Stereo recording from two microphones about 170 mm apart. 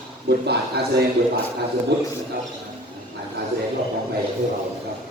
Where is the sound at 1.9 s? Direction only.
90° right.